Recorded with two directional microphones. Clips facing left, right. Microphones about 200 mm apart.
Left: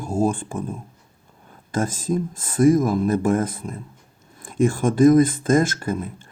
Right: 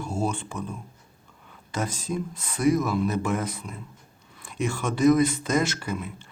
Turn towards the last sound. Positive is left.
turn(degrees=50)  # may be behind; listen again after turning